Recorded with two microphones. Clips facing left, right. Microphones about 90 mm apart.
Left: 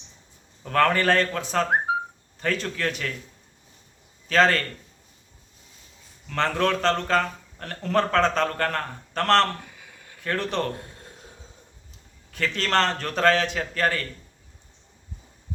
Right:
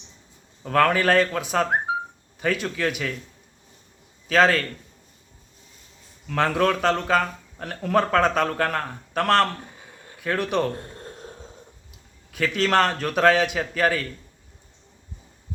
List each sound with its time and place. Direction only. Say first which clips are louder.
0.6 s a man's voice: right 1 dB; 5° right (ahead or behind)
4.3 s a man's voice: right 1 dB; 5° right (ahead or behind)
6.2 s speech: right 2 dB; 10° right (ahead or behind)
9.6 s a sound: right 3 dB; 35° right (ahead or behind)
10.2 s speech: right 3 dB; 10° right (ahead or behind)
10.9 s a sound: right 7 dB; 50° right (ahead or behind)
12.3 s speech: right 3 dB; 5° right (ahead or behind)